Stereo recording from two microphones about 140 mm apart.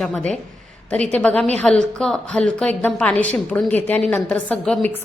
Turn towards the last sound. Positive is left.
turn(degrees=5)  # may be behind; listen again after turning